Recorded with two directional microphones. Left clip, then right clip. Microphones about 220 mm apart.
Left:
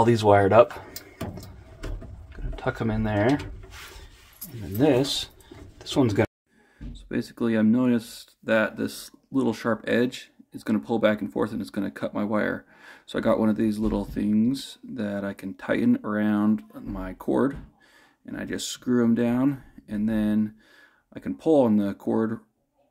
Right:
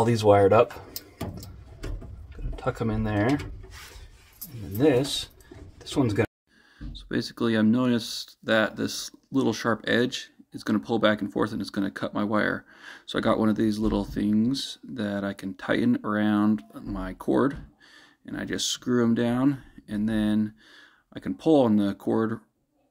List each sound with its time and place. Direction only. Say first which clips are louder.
0.0 s speech: left 1 dB; 20° left (ahead or behind)
2.5 s speech: left 1 dB; 20° left (ahead or behind)
4.7 s speech: left 1 dB; 25° left (ahead or behind)
6.9 s speech: right 1 dB; 5° right (ahead or behind)